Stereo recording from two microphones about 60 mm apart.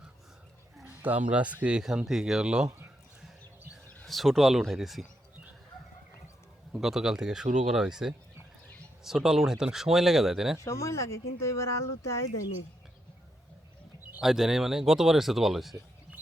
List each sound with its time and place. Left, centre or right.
0.9 s speech: right
1.8 s speech: centre
4.0 s speech: centre
6.7 s speech: centre
10.6 s speech: left
14.2 s speech: centre